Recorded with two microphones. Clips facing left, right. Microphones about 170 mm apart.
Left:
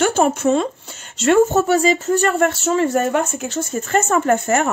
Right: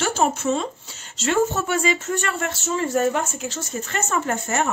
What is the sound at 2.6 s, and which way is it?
Speech, 65° left (ahead or behind).